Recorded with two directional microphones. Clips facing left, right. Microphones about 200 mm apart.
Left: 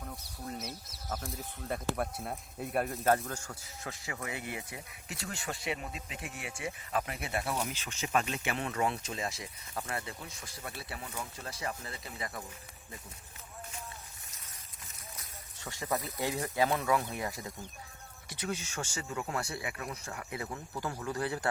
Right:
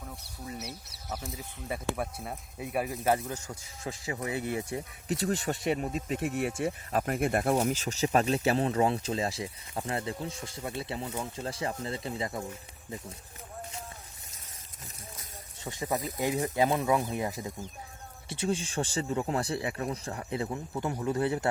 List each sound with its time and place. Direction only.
1.1 s speech: 5° right (ahead or behind)
3.8 s speech: 30° right (ahead or behind)
15.6 s speech: 20° right (ahead or behind)